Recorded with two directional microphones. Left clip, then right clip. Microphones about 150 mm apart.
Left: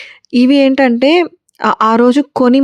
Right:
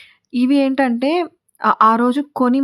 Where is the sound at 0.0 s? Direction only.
40° left (ahead or behind).